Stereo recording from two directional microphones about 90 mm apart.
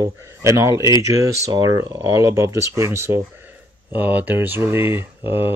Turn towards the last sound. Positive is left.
turn(degrees=-25)  # may be behind; listen again after turning